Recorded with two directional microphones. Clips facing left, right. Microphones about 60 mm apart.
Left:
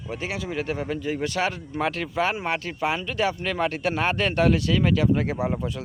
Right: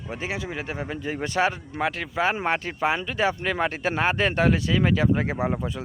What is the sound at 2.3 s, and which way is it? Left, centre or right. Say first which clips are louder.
Speech: right 2 dB; right.